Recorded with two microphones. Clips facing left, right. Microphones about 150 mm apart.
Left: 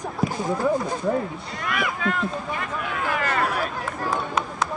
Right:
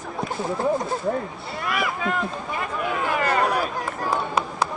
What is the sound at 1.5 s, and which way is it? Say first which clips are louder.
Speech: right 2 dB; centre (ahead or behind).